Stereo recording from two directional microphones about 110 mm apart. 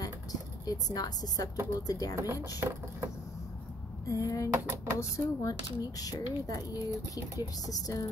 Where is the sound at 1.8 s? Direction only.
35° left (ahead or behind).